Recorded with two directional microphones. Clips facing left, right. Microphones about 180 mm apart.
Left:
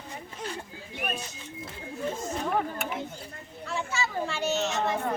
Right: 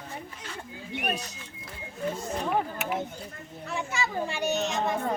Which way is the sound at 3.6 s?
15° right (ahead or behind).